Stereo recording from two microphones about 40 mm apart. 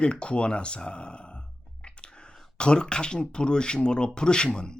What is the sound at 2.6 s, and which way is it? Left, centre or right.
Speech, left.